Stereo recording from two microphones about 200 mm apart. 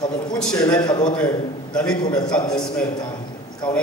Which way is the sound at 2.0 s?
20° left (ahead or behind).